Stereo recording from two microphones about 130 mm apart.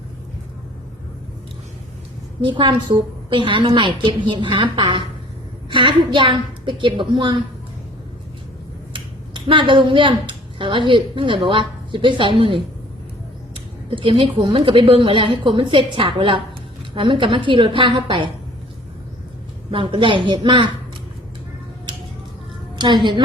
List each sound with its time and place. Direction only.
2.4 s a woman's voice: 35° right (ahead or behind)
8.9 s a woman's voice: 40° right (ahead or behind)
19.7 s a woman's voice: 40° right (ahead or behind)
22.7 s music: 35° right (ahead or behind)